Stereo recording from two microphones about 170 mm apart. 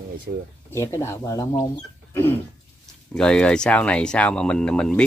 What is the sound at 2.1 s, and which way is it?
Cough, 15° left (ahead or behind).